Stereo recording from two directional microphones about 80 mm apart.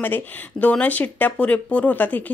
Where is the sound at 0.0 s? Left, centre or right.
Left.